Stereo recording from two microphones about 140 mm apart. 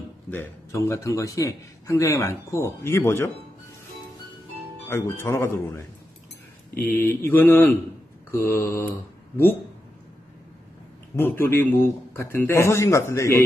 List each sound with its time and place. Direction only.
0.3 s a man's voice: 20° left (ahead or behind)
4.8 s a man's voice: 15° left (ahead or behind)
11.1 s a man's voice: 15° left (ahead or behind)